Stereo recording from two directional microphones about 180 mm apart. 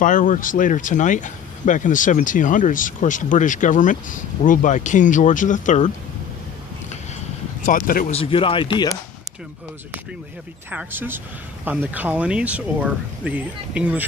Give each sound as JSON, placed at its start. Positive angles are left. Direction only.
{"t": 0.0, "sound": "speech", "side_deg": 45}
{"t": 7.6, "sound": "speech", "side_deg": 50}
{"t": 8.1, "sound": "speech", "side_deg": 30}
{"t": 10.7, "sound": "speech", "side_deg": -10}